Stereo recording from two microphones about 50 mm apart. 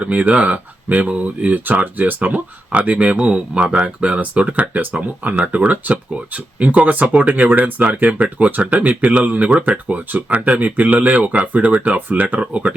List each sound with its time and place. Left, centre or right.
0.0 s speech: right